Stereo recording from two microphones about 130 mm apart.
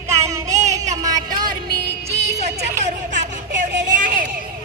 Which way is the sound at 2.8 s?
65° right (ahead or behind).